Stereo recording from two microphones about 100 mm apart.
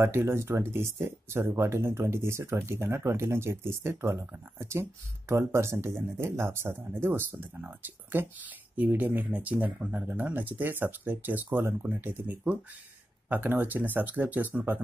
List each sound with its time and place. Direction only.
0.0 s speech: 25° right (ahead or behind)